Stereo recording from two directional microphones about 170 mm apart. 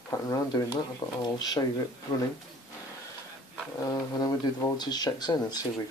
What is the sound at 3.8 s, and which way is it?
Speech, 20° left (ahead or behind).